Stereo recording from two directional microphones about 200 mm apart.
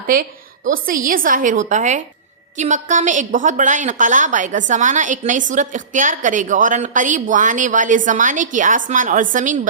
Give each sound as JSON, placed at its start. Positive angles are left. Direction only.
{"t": 0.1, "sound": "a woman's voice", "side_deg": -45}